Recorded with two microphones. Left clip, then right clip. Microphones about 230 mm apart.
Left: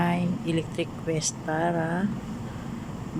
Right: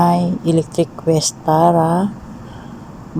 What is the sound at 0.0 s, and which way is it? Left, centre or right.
A woman's voice, right.